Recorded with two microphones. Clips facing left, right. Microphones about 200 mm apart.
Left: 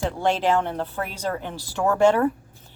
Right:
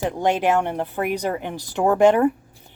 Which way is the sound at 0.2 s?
15° right (ahead or behind).